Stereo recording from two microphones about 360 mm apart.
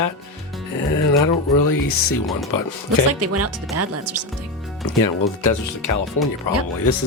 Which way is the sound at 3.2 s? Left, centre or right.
Right.